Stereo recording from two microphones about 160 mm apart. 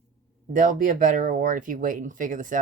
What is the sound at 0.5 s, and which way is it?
Speech, 55° right (ahead or behind).